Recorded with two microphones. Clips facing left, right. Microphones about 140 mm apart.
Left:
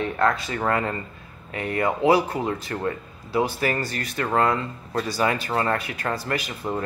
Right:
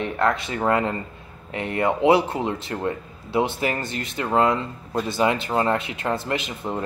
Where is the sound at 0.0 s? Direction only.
20° right (ahead or behind).